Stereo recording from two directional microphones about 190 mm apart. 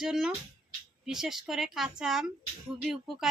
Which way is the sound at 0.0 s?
Centre (ahead or behind).